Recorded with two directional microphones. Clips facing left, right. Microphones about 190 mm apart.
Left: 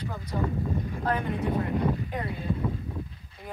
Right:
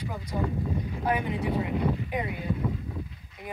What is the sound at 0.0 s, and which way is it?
Speech, 10° right (ahead or behind).